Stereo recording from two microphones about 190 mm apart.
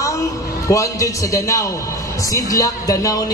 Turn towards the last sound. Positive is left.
turn(degrees=20)  # may be behind; listen again after turning